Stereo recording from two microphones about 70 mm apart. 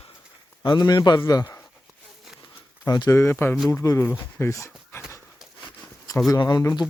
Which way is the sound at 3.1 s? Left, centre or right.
Left.